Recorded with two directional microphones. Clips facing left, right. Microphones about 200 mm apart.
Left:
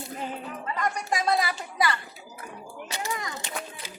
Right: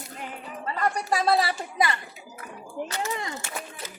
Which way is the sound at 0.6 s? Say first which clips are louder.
Right 4 dB; 35° right (ahead or behind).